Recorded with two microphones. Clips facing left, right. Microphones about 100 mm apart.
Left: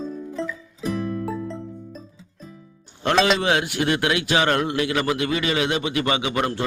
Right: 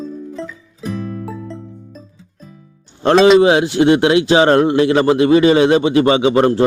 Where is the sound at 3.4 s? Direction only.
25° right (ahead or behind).